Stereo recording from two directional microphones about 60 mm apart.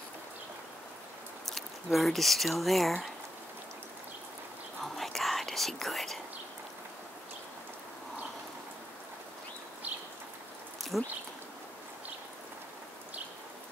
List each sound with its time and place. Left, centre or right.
1.5 s speech: centre
4.8 s whispering: centre
9.9 s bird: right
10.8 s a sound: centre